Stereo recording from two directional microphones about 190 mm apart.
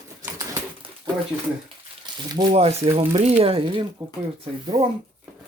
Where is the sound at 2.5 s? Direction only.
35° right (ahead or behind).